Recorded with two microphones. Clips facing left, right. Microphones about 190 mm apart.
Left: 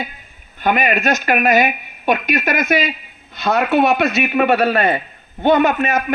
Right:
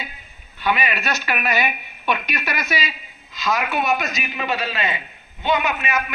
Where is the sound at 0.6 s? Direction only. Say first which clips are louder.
Left 6 dB; 50° left (ahead or behind).